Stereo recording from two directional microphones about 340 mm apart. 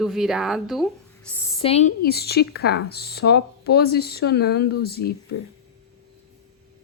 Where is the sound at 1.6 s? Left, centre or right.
Centre.